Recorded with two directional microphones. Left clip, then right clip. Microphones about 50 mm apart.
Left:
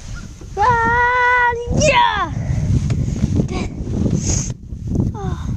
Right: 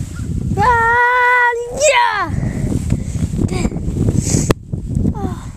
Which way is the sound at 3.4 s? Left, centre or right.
Right.